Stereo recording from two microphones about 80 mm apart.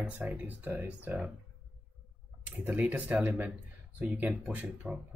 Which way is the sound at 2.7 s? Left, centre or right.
Right.